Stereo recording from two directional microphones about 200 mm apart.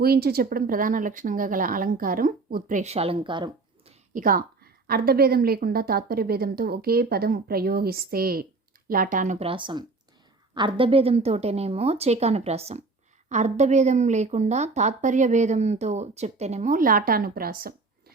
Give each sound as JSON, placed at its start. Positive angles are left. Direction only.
{"t": 0.0, "sound": "a woman's voice", "side_deg": -50}
{"t": 4.1, "sound": "a woman's voice", "side_deg": -45}